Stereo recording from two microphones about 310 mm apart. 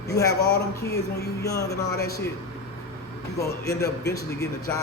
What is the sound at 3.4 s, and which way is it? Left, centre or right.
A man's voice, centre.